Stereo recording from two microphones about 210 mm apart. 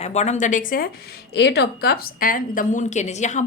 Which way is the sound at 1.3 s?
55° left (ahead or behind).